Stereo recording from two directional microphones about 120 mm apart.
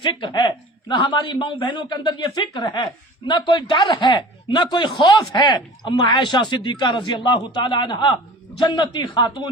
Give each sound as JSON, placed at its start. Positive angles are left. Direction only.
{"t": 0.0, "sound": "speech", "side_deg": 40}